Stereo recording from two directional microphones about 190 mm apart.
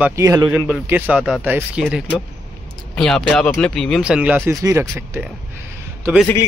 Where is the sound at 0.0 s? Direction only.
15° right (ahead or behind).